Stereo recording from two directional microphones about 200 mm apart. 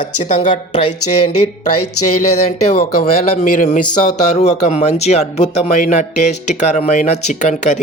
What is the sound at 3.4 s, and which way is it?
Speech, 40° left (ahead or behind).